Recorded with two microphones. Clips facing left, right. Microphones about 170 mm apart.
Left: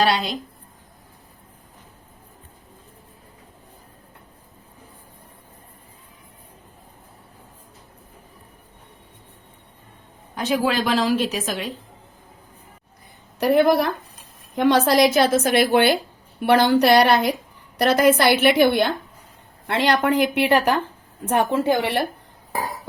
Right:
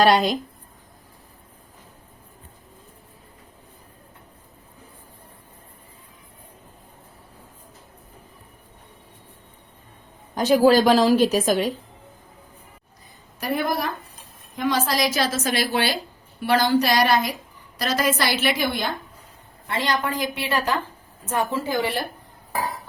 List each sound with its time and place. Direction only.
0.0 s a woman's voice: 45° right (ahead or behind)
10.3 s a woman's voice: 40° right (ahead or behind)
13.4 s a woman's voice: 65° left (ahead or behind)